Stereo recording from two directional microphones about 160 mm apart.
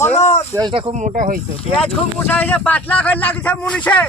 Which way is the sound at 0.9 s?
50° right (ahead or behind).